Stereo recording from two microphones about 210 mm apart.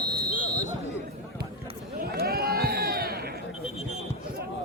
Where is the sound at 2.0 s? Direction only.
45° right (ahead or behind).